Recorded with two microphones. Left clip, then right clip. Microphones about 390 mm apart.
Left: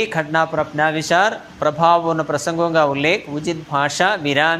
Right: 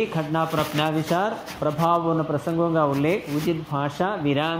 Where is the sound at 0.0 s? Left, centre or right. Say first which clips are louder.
Left 6 dB; left.